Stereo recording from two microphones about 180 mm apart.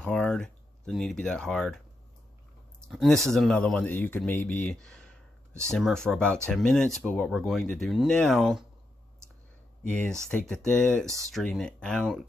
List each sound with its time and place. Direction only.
0.0 s speech: 5° left (ahead or behind)
2.9 s speech: centre (ahead or behind)
10.2 s speech: 5° left (ahead or behind)